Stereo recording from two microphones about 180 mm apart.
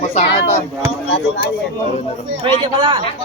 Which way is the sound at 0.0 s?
35° left (ahead or behind).